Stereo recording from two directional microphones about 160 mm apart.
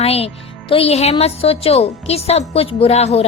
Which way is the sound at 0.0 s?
40° left (ahead or behind).